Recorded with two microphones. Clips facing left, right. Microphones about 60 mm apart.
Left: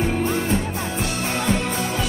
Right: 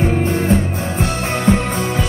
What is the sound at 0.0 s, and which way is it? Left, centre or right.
Music, right.